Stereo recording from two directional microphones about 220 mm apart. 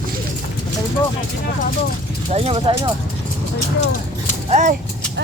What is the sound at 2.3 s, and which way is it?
Speech, 25° right (ahead or behind).